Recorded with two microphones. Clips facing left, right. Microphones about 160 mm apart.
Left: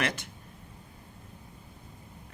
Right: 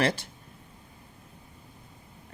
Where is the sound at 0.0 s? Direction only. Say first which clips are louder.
Right 5 dB; 30° right (ahead or behind).